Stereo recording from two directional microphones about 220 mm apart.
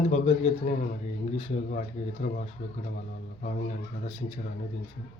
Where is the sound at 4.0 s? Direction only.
30° left (ahead or behind).